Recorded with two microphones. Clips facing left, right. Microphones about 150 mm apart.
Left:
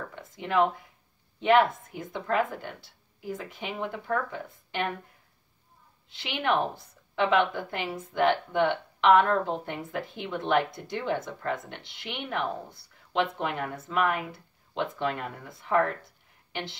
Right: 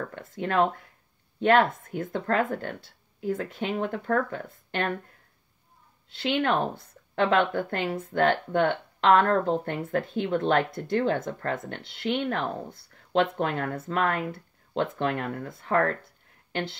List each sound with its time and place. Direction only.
0.1 s a woman's voice: 60° right (ahead or behind)
6.2 s a woman's voice: 55° right (ahead or behind)
13.6 s a woman's voice: 60° right (ahead or behind)